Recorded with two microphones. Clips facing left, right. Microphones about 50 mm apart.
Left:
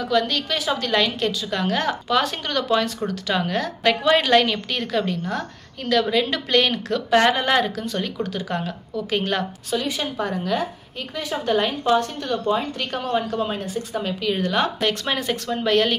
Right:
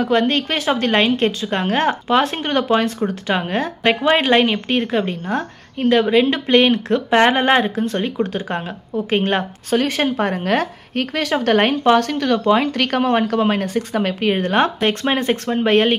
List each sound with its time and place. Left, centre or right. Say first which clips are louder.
0.0 s a woman's voice: right 5 dB; right
9.8 s a woman's voice: right 7 dB; right